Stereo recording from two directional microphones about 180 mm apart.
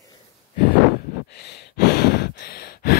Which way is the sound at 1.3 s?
70° left (ahead or behind).